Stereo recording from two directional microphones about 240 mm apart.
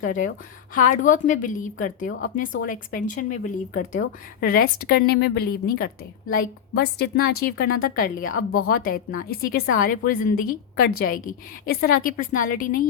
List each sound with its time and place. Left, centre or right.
0.0 s a woman's voice: left
3.9 s a woman's voice: left